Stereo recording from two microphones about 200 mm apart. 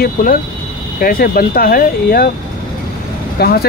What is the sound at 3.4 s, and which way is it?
Speech, 50° left (ahead or behind).